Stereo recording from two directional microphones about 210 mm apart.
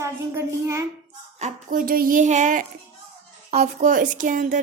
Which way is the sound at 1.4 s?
35° right (ahead or behind).